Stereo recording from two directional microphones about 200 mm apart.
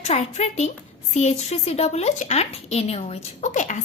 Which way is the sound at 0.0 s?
35° left (ahead or behind).